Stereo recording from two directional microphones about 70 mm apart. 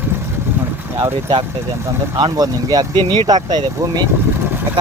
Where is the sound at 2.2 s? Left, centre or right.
Right.